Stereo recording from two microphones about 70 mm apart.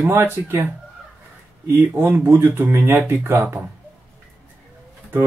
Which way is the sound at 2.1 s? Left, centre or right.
Right.